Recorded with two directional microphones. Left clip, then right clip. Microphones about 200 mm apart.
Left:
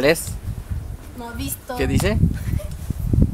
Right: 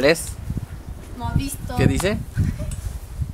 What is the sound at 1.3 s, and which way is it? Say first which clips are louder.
Speech: even; 40° left (ahead or behind).